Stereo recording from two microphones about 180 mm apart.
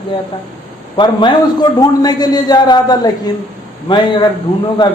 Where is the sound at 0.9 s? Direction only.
25° left (ahead or behind).